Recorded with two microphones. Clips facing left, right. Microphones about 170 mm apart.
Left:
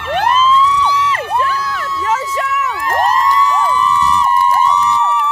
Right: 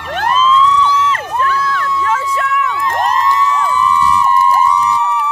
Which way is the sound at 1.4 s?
10° left (ahead or behind).